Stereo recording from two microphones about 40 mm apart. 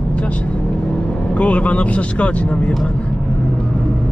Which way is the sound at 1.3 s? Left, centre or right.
Left.